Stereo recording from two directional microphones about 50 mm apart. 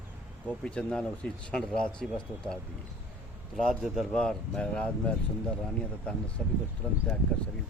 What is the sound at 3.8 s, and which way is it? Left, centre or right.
Speech, centre.